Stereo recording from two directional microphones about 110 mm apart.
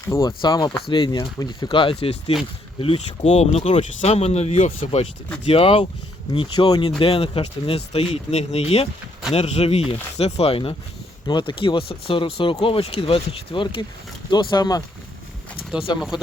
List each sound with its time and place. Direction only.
0.1 s speech: 35° left (ahead or behind)
0.9 s speech: 45° left (ahead or behind)
14.3 s speech: 40° left (ahead or behind)
16.0 s speech: 5° right (ahead or behind)